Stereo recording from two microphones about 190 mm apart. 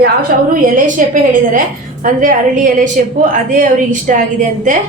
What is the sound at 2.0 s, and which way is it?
A woman's voice, 45° right (ahead or behind).